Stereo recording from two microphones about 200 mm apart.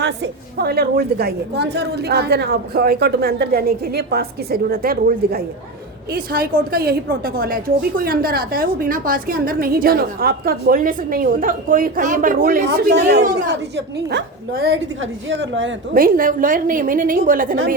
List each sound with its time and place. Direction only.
0.0 s a woman's voice: 55° right (ahead or behind)
15.3 s a woman's voice: 65° right (ahead or behind)
16.0 s a woman's voice: 45° right (ahead or behind)